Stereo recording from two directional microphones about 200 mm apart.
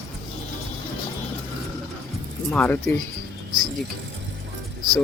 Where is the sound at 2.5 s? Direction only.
10° left (ahead or behind).